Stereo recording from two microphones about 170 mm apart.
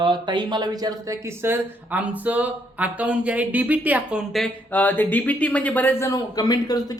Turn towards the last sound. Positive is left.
turn(degrees=20)  # may be behind; listen again after turning